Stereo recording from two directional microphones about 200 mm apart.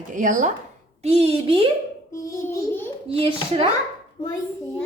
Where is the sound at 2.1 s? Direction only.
15° left (ahead or behind).